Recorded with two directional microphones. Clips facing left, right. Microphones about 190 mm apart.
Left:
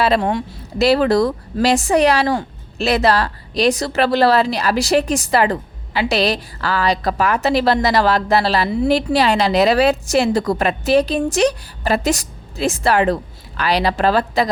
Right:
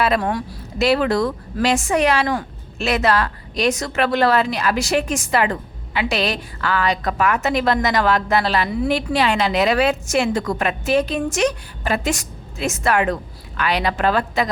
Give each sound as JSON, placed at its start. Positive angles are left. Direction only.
{"t": 0.0, "sound": "a woman's voice", "side_deg": 25}
{"t": 0.8, "sound": "speech", "side_deg": 35}